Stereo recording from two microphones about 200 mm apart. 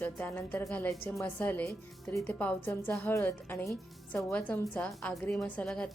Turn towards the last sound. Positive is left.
turn(degrees=5)  # may be behind; listen again after turning